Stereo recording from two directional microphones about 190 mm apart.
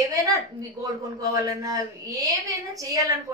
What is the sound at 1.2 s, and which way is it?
A woman's voice, 20° right (ahead or behind).